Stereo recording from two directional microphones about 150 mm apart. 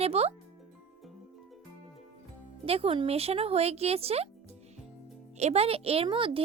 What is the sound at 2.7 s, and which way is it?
A child's voice, 40° right (ahead or behind).